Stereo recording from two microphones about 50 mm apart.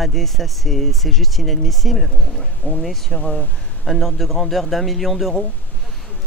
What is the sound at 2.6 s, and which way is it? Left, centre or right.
Speech, left.